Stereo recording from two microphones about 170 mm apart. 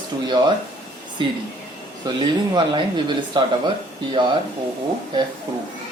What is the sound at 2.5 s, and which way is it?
Speech, 25° right (ahead or behind).